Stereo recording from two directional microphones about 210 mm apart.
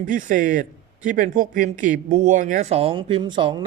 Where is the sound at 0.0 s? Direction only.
40° right (ahead or behind).